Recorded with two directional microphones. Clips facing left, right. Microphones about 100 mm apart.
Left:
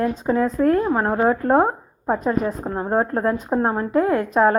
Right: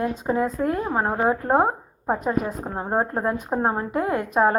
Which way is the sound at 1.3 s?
20° right (ahead or behind).